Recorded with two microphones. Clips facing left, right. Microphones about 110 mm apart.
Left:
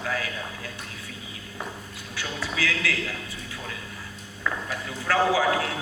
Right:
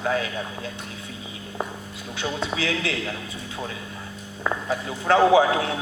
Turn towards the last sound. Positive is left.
turn(degrees=-25)  # may be behind; listen again after turning